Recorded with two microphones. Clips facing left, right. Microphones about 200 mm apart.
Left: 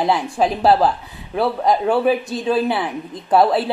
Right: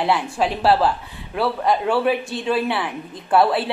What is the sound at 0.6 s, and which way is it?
Speech, 20° left (ahead or behind).